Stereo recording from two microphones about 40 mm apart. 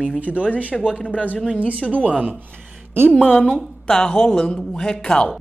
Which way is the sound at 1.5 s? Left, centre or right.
Right.